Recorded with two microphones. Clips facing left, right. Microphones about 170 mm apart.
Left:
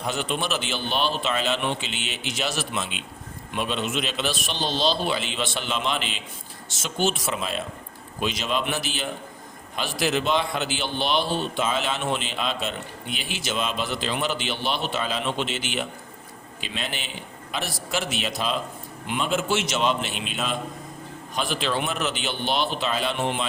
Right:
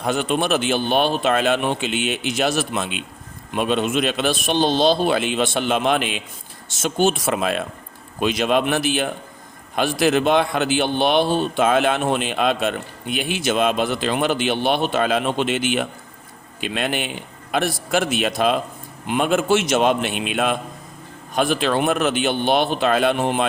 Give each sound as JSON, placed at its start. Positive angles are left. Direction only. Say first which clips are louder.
{"t": 0.0, "sound": "a man's voice", "louder": "right 7 dB", "side_deg": -50}